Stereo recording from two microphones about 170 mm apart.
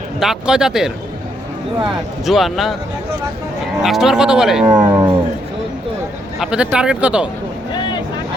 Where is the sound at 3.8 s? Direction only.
Centre (ahead or behind).